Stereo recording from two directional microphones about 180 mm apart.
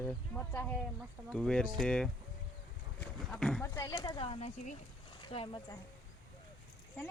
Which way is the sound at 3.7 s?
20° left (ahead or behind).